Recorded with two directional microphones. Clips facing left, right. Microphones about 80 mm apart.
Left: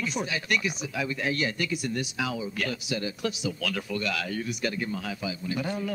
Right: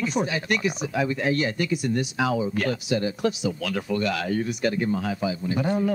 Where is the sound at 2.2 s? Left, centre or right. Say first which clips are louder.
Right 8 dB; right.